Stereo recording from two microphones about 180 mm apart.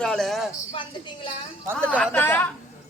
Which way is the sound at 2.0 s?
10° left (ahead or behind).